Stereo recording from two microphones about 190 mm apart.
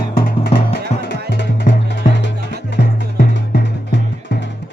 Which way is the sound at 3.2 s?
55° left (ahead or behind).